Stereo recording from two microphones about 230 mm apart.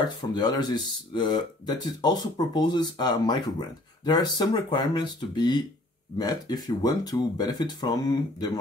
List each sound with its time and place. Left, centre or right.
0.3 s speech: centre